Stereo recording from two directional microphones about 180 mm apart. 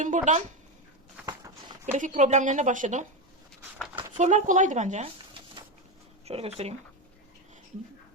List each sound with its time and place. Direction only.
0.0 s a woman's voice: 45° right (ahead or behind)
1.2 s a sound: 25° right (ahead or behind)
1.9 s a woman's voice: 45° right (ahead or behind)
4.2 s speech: 40° right (ahead or behind)
6.2 s speech: 35° right (ahead or behind)